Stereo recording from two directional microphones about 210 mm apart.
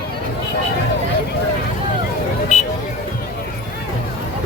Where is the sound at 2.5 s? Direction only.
35° left (ahead or behind).